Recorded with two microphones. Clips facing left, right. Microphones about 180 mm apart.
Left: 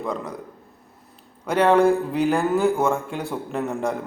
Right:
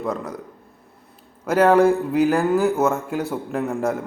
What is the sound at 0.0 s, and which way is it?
Speech, 5° right (ahead or behind).